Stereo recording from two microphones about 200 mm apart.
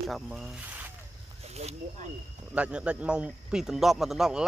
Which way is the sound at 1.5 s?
30° right (ahead or behind).